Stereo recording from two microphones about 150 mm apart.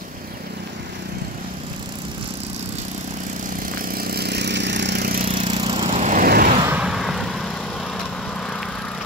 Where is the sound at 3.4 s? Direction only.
65° right (ahead or behind); by 4.4 s 90° right.